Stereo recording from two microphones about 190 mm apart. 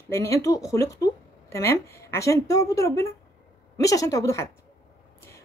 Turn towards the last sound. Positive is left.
turn(degrees=15)  # may be behind; listen again after turning